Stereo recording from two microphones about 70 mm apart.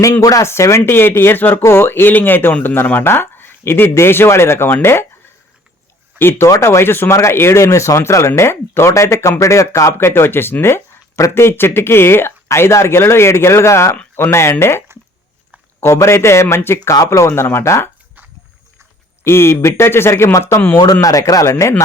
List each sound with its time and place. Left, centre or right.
0.2 s speech: left
0.4 s speech: left
6.1 s speech: left
10.1 s speech: left
19.2 s speech: left
20.7 s speech: left